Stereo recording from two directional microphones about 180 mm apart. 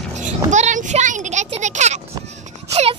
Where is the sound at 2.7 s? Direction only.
35° right (ahead or behind).